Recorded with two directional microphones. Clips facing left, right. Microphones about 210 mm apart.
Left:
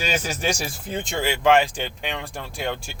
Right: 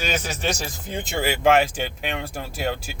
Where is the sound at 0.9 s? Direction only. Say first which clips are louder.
Even; 5° right (ahead or behind).